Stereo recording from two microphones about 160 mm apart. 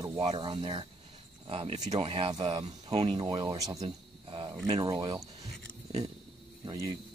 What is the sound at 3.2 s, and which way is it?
Speech, 25° right (ahead or behind).